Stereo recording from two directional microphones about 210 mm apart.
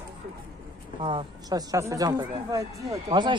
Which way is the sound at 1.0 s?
20° right (ahead or behind).